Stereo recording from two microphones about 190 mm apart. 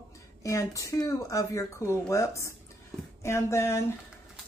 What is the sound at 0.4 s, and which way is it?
Speech, 15° left (ahead or behind).